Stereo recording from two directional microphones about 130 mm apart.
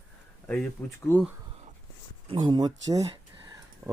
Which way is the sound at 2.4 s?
30° right (ahead or behind).